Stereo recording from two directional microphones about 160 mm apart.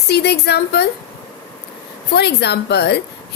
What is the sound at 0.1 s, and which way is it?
Speech, 90° left.